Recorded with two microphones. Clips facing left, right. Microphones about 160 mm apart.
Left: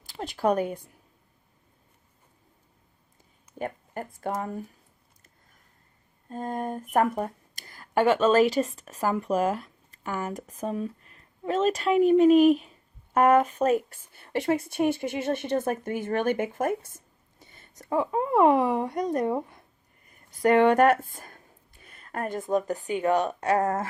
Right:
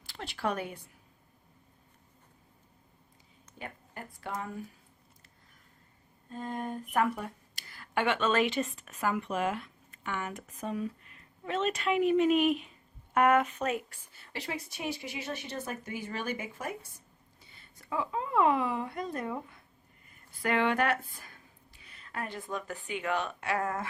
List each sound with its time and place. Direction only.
0.2 s speech: 45° left (ahead or behind)
3.6 s speech: 45° left (ahead or behind)
6.2 s speech: 45° left (ahead or behind)